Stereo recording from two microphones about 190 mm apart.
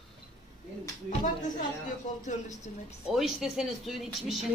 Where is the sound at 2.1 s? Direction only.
40° left (ahead or behind).